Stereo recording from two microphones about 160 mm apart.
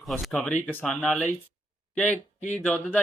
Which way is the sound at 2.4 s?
45° left (ahead or behind).